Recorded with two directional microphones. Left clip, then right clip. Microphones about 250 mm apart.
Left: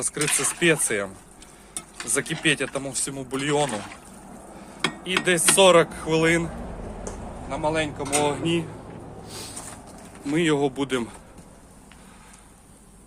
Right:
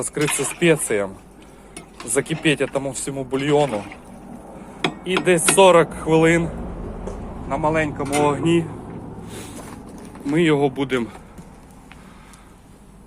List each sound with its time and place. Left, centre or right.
0.0 s speech: centre
2.1 s speech: centre
4.8 s speech: centre
7.9 s speech: centre
10.2 s speech: centre